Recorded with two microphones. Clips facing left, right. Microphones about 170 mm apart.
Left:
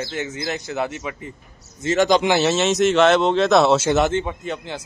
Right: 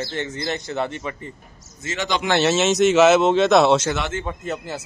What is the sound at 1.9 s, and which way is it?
Speech, 45° left (ahead or behind).